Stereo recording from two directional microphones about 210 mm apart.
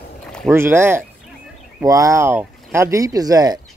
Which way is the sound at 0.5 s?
10° right (ahead or behind).